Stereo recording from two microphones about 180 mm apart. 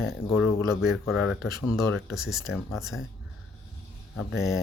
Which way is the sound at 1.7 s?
Centre (ahead or behind).